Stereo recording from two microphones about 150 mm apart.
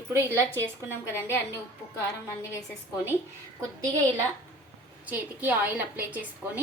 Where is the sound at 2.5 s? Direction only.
15° left (ahead or behind).